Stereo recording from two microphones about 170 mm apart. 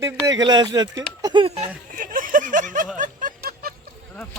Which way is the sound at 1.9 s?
55° right (ahead or behind).